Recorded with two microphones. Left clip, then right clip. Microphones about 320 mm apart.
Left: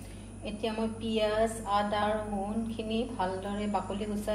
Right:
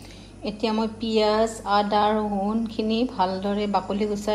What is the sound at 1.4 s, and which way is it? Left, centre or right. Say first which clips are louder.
Speech: right 7 dB; right.